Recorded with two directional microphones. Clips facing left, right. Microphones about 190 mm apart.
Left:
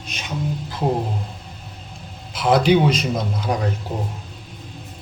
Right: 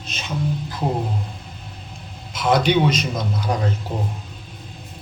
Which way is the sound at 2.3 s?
30° left (ahead or behind).